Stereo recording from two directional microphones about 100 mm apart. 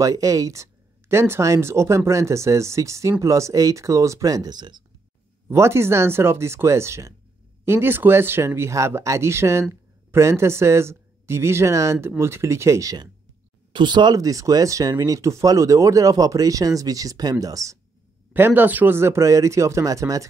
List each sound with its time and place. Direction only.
0.0 s speech: 35° right (ahead or behind)
5.5 s speech: 25° right (ahead or behind)
13.7 s speech: 50° right (ahead or behind)
18.3 s speech: 20° right (ahead or behind)